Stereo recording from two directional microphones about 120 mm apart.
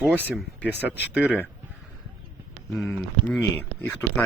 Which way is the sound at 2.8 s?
10° left (ahead or behind).